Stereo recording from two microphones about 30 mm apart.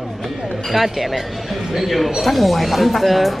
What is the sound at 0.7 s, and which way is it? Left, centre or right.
Speech, centre.